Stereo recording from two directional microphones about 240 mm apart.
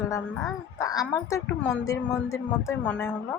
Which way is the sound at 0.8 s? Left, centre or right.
Centre.